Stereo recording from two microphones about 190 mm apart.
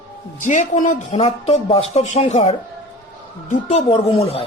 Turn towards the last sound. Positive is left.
turn(degrees=25)  # may be behind; listen again after turning